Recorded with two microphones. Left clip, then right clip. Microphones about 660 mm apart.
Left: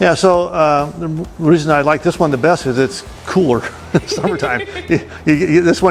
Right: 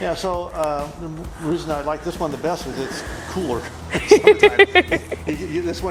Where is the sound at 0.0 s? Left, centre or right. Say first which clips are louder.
Left 12 dB; left.